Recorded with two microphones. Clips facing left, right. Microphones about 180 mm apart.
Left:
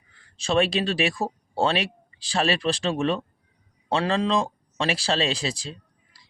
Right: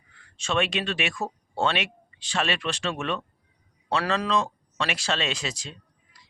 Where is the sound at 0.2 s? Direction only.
35° left (ahead or behind).